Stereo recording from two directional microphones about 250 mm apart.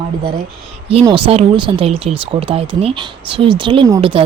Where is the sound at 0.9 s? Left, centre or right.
Right.